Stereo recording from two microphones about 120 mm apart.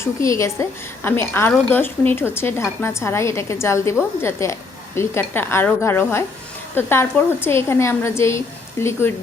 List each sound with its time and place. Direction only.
0.0 s a woman's voice: 25° left (ahead or behind)